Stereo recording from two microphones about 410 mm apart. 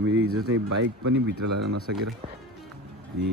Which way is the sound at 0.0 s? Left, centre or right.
Right.